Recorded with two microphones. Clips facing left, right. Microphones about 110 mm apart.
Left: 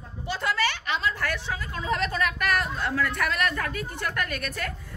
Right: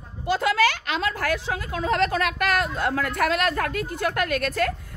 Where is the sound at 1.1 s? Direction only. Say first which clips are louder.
Right 4 dB; 55° right (ahead or behind).